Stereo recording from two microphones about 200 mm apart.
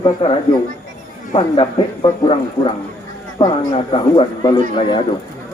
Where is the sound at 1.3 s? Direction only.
25° left (ahead or behind).